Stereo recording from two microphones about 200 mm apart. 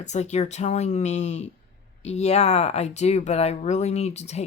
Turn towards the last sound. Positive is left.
turn(degrees=35)  # may be behind; listen again after turning